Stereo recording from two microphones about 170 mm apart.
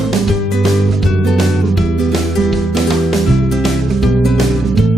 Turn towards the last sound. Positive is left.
turn(degrees=0)  # may be behind; listen again after turning